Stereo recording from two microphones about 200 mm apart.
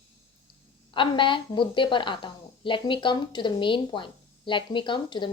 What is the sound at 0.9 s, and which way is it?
A woman's voice, 25° left (ahead or behind).